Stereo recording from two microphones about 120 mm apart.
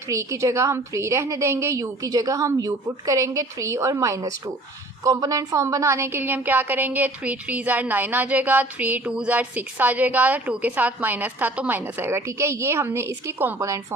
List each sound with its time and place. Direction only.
0.1 s a woman's voice: 25° right (ahead or behind)